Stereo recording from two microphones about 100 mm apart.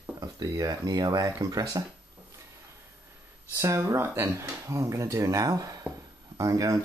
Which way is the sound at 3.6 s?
30° right (ahead or behind).